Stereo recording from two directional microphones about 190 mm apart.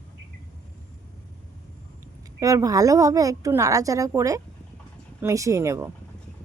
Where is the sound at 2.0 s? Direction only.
15° right (ahead or behind).